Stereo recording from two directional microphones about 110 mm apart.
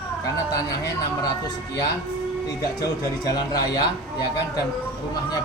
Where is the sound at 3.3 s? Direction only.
35° left (ahead or behind).